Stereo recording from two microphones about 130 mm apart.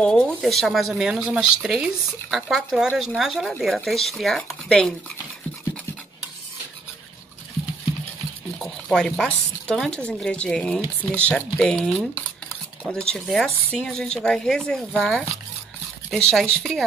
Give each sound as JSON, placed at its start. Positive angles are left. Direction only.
{"t": 0.0, "sound": "speech", "side_deg": 5}
{"t": 8.5, "sound": "speech", "side_deg": 5}